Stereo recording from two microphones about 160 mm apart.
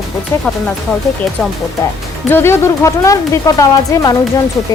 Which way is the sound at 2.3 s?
15° left (ahead or behind).